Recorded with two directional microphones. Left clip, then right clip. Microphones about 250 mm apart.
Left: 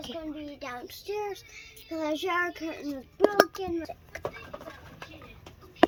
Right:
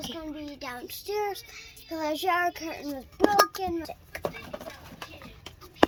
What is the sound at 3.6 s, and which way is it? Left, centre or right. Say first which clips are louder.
Speech: right 2 dB; right.